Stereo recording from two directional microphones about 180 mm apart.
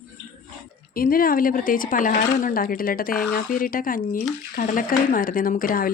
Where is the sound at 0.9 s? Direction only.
55° left (ahead or behind).